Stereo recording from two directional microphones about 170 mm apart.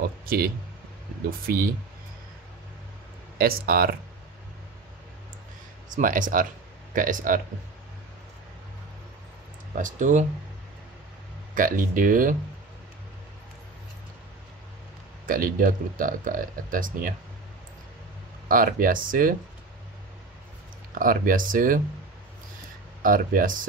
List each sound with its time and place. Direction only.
0.2 s speech: 60° right (ahead or behind)
1.5 s speech: 60° right (ahead or behind)
3.3 s speech: 60° right (ahead or behind)
5.9 s speech: 50° right (ahead or behind)
9.8 s speech: 50° right (ahead or behind)
11.5 s speech: 50° right (ahead or behind)
15.2 s speech: 55° right (ahead or behind)
18.5 s speech: 55° right (ahead or behind)
21.0 s speech: 55° right (ahead or behind)
23.0 s speech: 55° right (ahead or behind)